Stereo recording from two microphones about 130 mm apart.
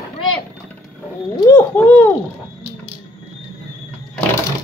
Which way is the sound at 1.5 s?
15° left (ahead or behind).